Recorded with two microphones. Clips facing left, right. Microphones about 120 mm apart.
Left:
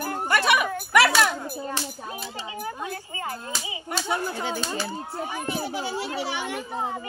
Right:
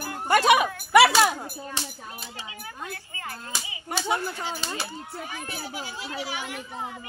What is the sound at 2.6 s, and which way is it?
Speech, 25° left (ahead or behind).